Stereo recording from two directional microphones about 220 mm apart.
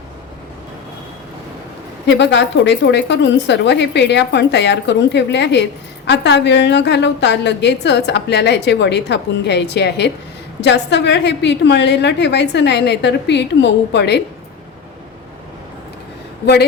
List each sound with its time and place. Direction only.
2.0 s a woman's voice: 55° left (ahead or behind)